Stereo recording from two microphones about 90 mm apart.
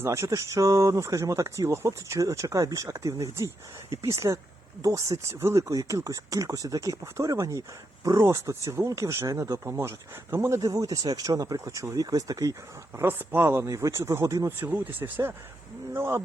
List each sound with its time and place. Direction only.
0.0 s speech: 30° right (ahead or behind)
10.6 s speech: 40° right (ahead or behind)
13.0 s speech: 25° right (ahead or behind)
14.5 s speech: 25° right (ahead or behind)